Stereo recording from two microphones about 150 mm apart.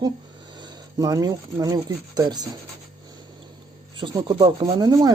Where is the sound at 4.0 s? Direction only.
30° right (ahead or behind).